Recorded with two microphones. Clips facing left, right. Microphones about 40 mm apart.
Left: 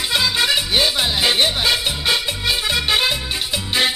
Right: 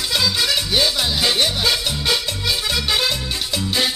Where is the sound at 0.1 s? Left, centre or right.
Left.